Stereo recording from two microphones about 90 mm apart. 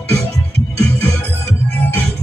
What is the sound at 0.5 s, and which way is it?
Music, 90° right.